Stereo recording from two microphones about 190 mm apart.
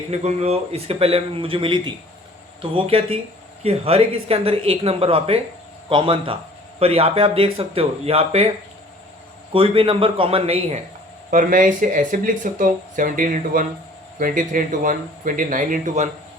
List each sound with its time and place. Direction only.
0.1 s a man's voice: 35° right (ahead or behind)
9.5 s a man's voice: 30° right (ahead or behind)
11.3 s speech: 45° right (ahead or behind)